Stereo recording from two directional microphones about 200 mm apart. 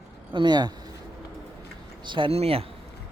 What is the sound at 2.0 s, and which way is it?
Speech, 25° right (ahead or behind).